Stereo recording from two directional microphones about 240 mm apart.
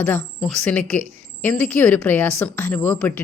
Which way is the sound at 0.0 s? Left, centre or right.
Centre.